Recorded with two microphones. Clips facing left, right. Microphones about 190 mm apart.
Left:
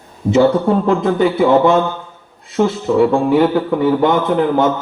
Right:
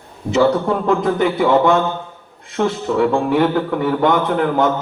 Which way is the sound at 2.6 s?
10° left (ahead or behind).